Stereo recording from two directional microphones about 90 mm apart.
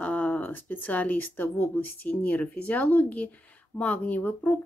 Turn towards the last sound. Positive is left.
turn(degrees=20)  # may be behind; listen again after turning